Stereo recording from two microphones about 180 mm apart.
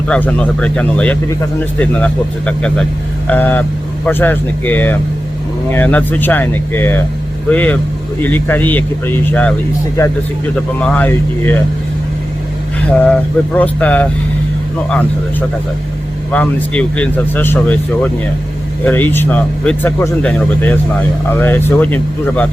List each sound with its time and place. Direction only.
0.1 s speech: 5° left (ahead or behind)
10.8 s speech: 10° left (ahead or behind)
13.0 s speech: 10° left (ahead or behind)